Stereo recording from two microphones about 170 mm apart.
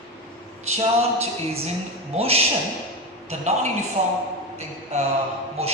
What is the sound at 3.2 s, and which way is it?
Speech, 40° right (ahead or behind).